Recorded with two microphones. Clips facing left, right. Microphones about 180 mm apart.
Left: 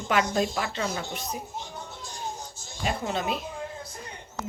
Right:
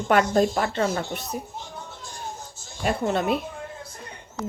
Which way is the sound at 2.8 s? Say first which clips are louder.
Right 5 dB; 55° right (ahead or behind).